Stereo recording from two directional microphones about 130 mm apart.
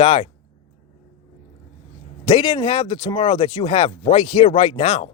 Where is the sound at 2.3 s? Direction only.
40° left (ahead or behind).